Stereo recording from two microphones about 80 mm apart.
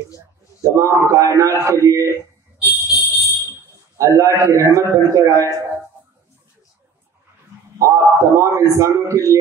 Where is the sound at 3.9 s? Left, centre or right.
Right.